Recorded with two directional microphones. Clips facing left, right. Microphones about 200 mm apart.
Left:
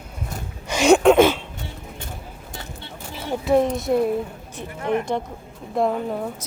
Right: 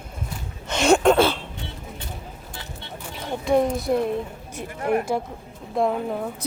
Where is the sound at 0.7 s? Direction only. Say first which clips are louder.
Left 3 dB; 10° left (ahead or behind).